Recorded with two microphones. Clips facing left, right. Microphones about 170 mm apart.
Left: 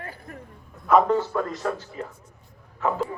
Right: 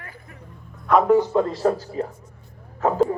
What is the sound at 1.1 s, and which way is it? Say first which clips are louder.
A man's voice: right 6 dB; 20° right (ahead or behind).